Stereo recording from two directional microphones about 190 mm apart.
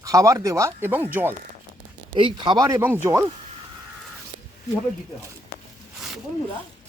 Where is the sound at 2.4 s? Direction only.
25° right (ahead or behind).